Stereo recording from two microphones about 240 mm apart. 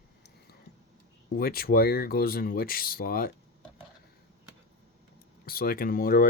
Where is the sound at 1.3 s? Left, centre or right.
Left.